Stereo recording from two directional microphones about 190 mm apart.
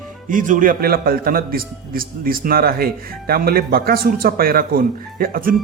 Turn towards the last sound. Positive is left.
turn(degrees=-50)  # may be behind; listen again after turning